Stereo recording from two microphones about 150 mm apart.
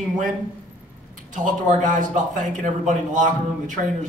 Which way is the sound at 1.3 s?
60° right (ahead or behind).